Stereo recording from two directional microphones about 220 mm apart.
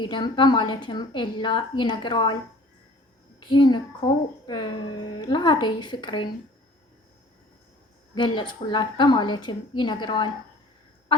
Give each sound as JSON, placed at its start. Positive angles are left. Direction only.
{"t": 0.0, "sound": "a child's voice", "side_deg": 20}
{"t": 3.4, "sound": "a child's voice", "side_deg": 20}
{"t": 8.1, "sound": "a child's voice", "side_deg": 20}